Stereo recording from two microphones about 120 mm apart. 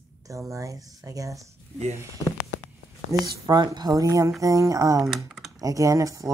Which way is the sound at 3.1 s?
35° right (ahead or behind).